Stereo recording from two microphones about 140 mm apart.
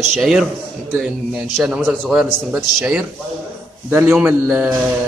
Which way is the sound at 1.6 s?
Centre (ahead or behind).